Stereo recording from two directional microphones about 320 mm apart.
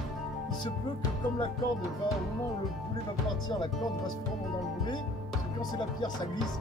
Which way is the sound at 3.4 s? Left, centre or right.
Centre.